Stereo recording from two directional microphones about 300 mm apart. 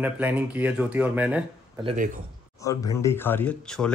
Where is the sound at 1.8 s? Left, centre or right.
Right.